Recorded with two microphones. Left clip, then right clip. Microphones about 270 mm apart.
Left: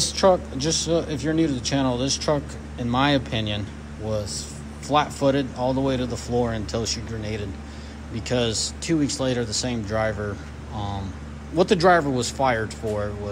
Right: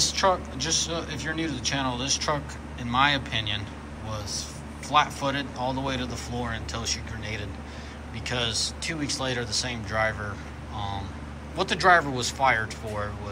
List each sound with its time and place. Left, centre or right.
0.0 s speech: centre